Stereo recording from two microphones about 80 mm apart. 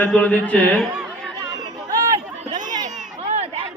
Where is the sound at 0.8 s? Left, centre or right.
Centre.